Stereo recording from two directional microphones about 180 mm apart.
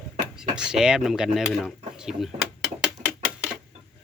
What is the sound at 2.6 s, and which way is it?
Typewriter, centre (ahead or behind).